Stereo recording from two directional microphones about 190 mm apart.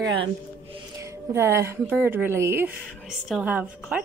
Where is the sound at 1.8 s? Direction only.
10° right (ahead or behind).